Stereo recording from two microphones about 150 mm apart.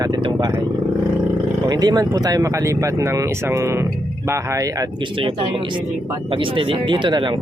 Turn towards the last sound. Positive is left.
turn(degrees=-30)  # may be behind; listen again after turning